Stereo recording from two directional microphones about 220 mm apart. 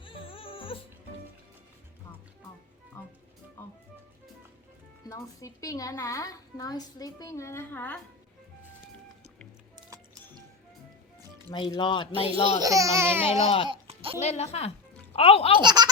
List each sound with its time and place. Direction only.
0.0 s music: 25° left (ahead or behind)
3.0 s music: 10° left (ahead or behind)
5.0 s a woman's voice: 15° left (ahead or behind)
11.5 s speech: 20° left (ahead or behind)
12.5 s speech: 15° right (ahead or behind)
13.4 s speech: 25° left (ahead or behind)
13.7 s music: 25° right (ahead or behind)
14.2 s a child's voice: 30° left (ahead or behind)
15.6 s speech: 20° right (ahead or behind)